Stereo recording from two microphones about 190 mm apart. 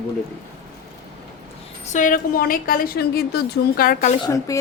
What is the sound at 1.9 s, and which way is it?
A woman's voice, 40° left (ahead or behind).